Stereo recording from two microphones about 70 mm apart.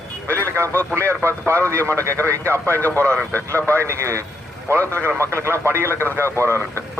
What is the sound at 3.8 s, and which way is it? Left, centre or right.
Speech, right.